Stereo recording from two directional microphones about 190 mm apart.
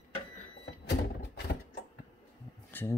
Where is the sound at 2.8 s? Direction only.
10° left (ahead or behind).